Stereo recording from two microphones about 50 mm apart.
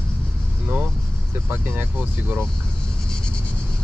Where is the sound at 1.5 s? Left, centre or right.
Right.